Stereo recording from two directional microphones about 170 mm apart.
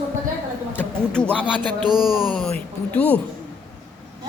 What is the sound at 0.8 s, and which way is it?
A man's voice, 5° left (ahead or behind).